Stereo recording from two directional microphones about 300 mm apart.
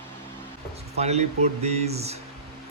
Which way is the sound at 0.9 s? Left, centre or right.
Right.